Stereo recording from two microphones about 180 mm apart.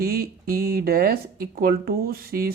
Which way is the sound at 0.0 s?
55° right (ahead or behind).